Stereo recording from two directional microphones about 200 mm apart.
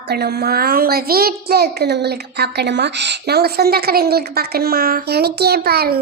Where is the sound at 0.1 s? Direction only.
55° right (ahead or behind).